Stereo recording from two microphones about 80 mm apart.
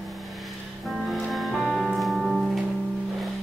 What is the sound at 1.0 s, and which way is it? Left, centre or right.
Music, centre.